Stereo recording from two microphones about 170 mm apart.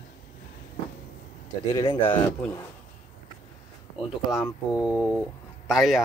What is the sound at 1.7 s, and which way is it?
Speech, 30° left (ahead or behind).